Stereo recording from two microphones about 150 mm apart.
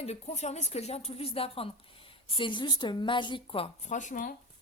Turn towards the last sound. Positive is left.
turn(degrees=60)  # may be behind; listen again after turning